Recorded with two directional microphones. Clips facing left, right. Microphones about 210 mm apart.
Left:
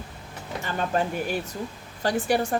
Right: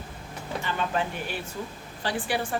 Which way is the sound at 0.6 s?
45° left (ahead or behind).